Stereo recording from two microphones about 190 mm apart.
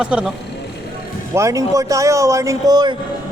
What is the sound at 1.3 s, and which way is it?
Speech, 15° right (ahead or behind).